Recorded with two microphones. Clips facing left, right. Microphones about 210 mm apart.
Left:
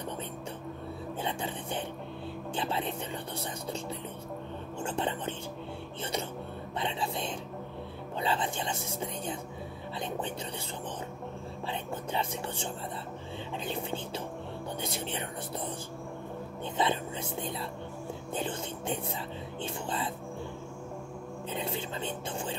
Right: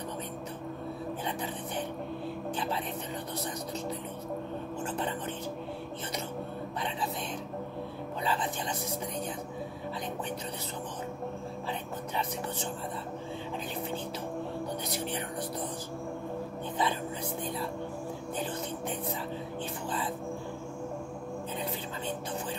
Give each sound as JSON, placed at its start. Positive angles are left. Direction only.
{"t": 1.2, "sound": "a sound", "side_deg": 25}
{"t": 4.8, "sound": "speech", "side_deg": 25}
{"t": 6.8, "sound": "music", "side_deg": 25}
{"t": 8.2, "sound": "speech", "side_deg": 25}
{"t": 12.1, "sound": "speech", "side_deg": 30}
{"t": 14.9, "sound": "music", "side_deg": 25}
{"t": 16.7, "sound": "whispering", "side_deg": 25}
{"t": 18.3, "sound": "music", "side_deg": 25}
{"t": 21.5, "sound": "a sound", "side_deg": 25}